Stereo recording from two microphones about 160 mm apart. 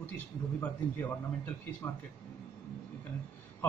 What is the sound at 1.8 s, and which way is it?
Speech, 15° left (ahead or behind).